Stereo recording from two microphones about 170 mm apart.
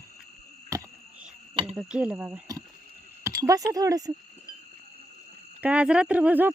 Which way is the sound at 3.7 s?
20° right (ahead or behind).